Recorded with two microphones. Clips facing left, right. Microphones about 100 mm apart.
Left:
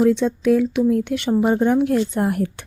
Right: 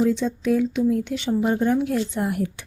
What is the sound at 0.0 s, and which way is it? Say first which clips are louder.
A woman's voice: left 5 dB; 65° left (ahead or behind).